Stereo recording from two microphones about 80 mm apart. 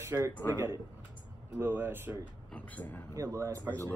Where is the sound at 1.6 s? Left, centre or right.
Right.